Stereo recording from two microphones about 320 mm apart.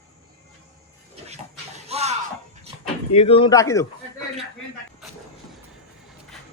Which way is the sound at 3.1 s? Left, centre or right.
Centre.